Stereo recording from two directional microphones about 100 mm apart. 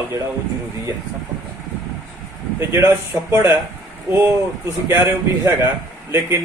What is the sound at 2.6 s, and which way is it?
Speech, 30° right (ahead or behind).